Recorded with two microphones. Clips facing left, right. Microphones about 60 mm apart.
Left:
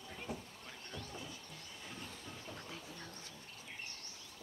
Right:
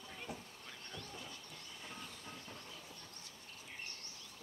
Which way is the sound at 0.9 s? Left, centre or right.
Centre.